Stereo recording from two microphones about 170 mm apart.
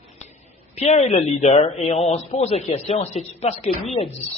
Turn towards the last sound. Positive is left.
turn(degrees=40)  # may be behind; listen again after turning